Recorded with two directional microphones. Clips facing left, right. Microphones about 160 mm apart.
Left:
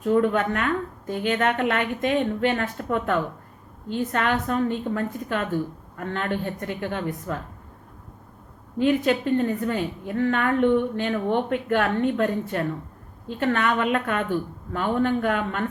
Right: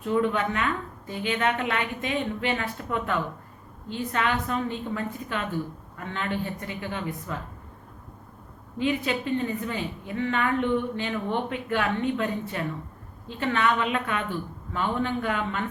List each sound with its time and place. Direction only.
0.0 s a woman's voice: 45° left (ahead or behind)
8.8 s a woman's voice: 50° left (ahead or behind)